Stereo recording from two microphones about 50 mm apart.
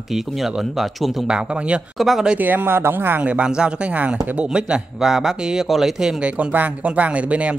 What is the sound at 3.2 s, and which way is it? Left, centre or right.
Speech, right.